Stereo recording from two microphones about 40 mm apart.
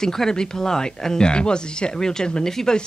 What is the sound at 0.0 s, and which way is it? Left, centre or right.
Speech, centre.